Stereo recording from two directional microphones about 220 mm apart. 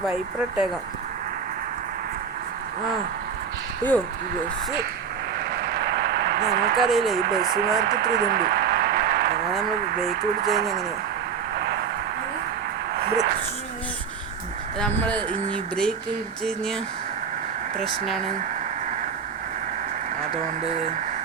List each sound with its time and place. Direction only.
0.0 s speech: 5° right (ahead or behind)
3.8 s speech: 5° left (ahead or behind)
5.5 s a sound: 45° right (ahead or behind)
6.8 s speech: centre (ahead or behind)
7.2 s speech: 45° right (ahead or behind)
7.8 s a sound: 45° right (ahead or behind)
9.8 s speech: 40° right (ahead or behind)
11.5 s a sound: 50° right (ahead or behind)
14.8 s speech: 5° left (ahead or behind)
20.3 s speech: 30° right (ahead or behind)